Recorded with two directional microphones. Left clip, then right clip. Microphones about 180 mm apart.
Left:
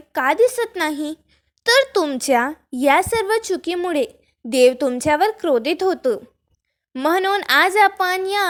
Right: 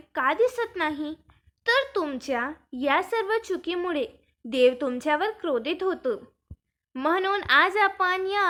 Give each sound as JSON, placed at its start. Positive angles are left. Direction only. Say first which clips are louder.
{"t": 0.1, "sound": "a woman's voice", "louder": "left 7 dB", "side_deg": 40}
{"t": 0.8, "sound": "a woman's voice", "louder": "left 6 dB", "side_deg": 45}